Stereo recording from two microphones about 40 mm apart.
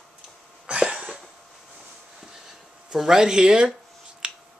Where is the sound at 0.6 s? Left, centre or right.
Right.